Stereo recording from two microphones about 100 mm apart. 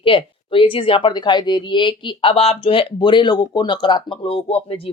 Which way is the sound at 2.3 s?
85° left.